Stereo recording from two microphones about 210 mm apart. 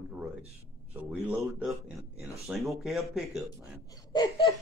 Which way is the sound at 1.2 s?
5° right (ahead or behind).